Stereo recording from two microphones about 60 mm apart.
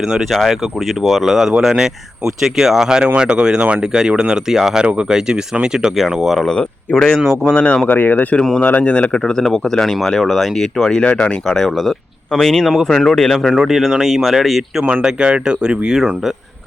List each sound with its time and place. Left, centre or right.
0.0 s speech: centre
6.5 s speech: centre
7.9 s speech: left
8.4 s speech: centre
11.4 s speech: centre
13.4 s speech: centre
15.0 s speech: centre